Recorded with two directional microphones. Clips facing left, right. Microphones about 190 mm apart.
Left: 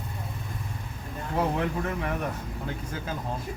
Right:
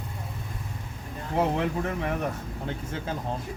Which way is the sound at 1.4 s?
25° right (ahead or behind).